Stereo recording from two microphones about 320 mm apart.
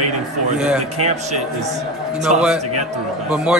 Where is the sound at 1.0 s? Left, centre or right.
Right.